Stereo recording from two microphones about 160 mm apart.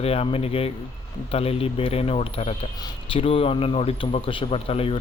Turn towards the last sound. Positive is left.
turn(degrees=35)  # may be behind; listen again after turning